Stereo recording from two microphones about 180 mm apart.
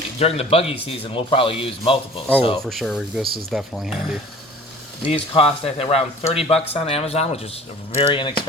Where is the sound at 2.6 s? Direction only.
Centre (ahead or behind).